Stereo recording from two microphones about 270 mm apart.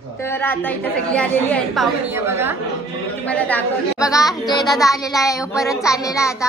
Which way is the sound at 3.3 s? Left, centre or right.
Centre.